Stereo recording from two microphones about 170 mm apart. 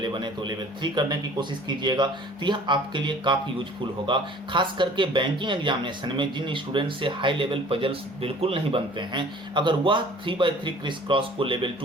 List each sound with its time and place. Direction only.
0.0 s speech: 25° right (ahead or behind)